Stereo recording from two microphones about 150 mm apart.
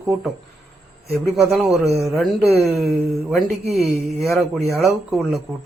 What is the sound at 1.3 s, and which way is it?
Speech, 5° right (ahead or behind).